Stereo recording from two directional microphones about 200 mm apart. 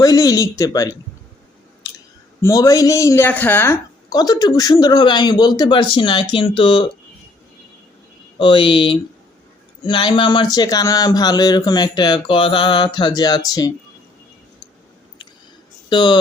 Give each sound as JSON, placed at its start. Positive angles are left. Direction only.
{"t": 0.0, "sound": "speech", "side_deg": 15}
{"t": 2.4, "sound": "a woman's voice", "side_deg": 15}
{"t": 8.4, "sound": "a woman's voice", "side_deg": 25}
{"t": 15.9, "sound": "a woman's voice", "side_deg": 25}